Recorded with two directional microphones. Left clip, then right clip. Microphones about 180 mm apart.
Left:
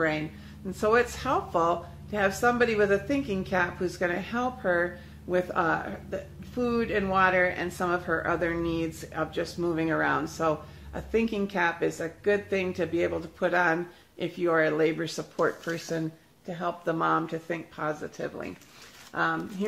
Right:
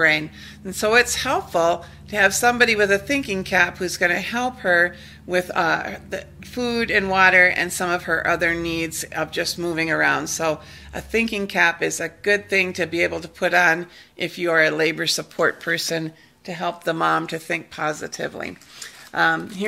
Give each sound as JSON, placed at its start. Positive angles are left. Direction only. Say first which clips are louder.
{"t": 0.7, "sound": "a woman's voice", "louder": "right 7 dB", "side_deg": -10}
{"t": 15.3, "sound": "a woman's voice", "louder": "right 5 dB", "side_deg": -15}
{"t": 18.0, "sound": "speech", "louder": "right 7 dB", "side_deg": -30}